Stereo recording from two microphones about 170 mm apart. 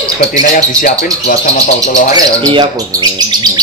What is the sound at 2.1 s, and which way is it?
Speech, 25° right (ahead or behind).